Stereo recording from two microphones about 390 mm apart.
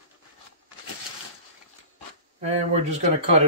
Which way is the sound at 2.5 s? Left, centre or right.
Centre.